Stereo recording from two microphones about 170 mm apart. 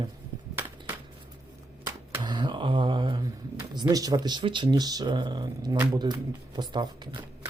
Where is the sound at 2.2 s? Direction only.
25° right (ahead or behind).